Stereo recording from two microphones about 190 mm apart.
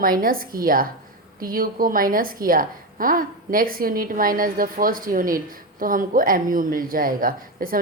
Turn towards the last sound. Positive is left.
turn(degrees=-50)  # may be behind; listen again after turning